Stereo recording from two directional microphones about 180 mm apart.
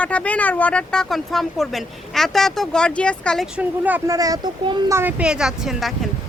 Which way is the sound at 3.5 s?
10° right (ahead or behind).